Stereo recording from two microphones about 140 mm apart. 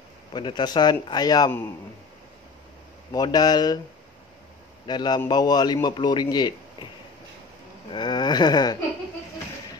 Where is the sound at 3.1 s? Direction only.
30° left (ahead or behind).